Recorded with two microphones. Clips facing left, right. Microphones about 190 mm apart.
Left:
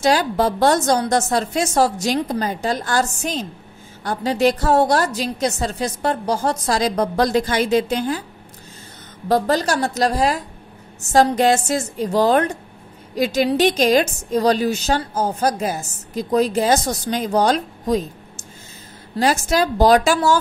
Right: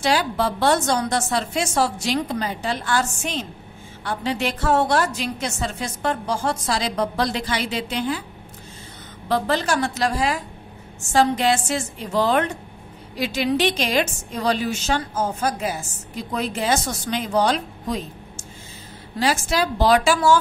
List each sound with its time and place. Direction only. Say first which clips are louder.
0.0 s a woman's voice: left 4 dB; 45° left (ahead or behind)
9.3 s a woman's voice: left 3 dB; 40° left (ahead or behind)
19.1 s a woman's voice: left 4 dB; 45° left (ahead or behind)